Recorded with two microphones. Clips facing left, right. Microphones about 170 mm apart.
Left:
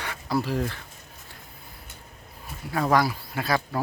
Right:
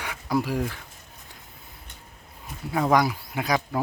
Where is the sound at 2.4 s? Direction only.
15° right (ahead or behind).